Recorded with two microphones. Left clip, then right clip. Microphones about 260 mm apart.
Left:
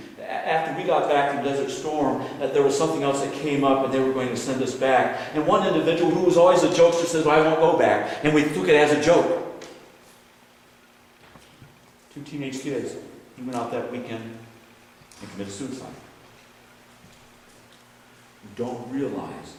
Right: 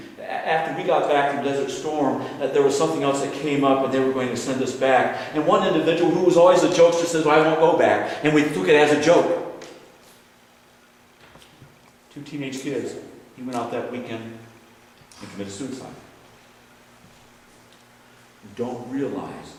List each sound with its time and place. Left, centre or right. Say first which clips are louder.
0.0 s a man's voice: right 1 dB; centre
12.2 s a man's voice: right 1 dB; centre
15.2 s a man's voice: right 1 dB; centre
18.6 s a man's voice: right 1 dB; right